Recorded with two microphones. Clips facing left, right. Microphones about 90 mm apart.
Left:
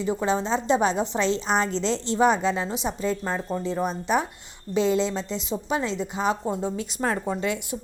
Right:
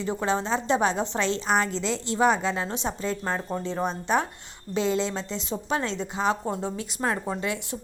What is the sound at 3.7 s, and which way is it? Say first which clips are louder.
Speech: left 1 dB; 25° right (ahead or behind).